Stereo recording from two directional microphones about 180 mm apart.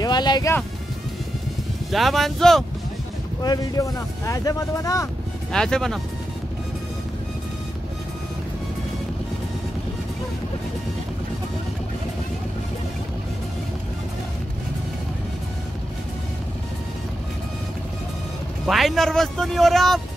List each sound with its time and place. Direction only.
0.0 s music: 25° left (ahead or behind)
1.9 s a man's voice: centre (ahead or behind)
3.4 s speech: 20° left (ahead or behind)
5.5 s a man's voice: 5° left (ahead or behind)
18.7 s a man's voice: centre (ahead or behind)